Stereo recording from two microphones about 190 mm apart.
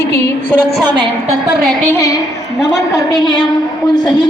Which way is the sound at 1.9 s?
15° left (ahead or behind).